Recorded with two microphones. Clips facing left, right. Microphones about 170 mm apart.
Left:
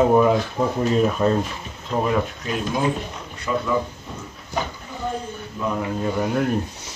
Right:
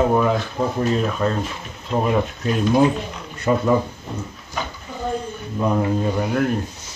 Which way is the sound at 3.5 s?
45° right (ahead or behind).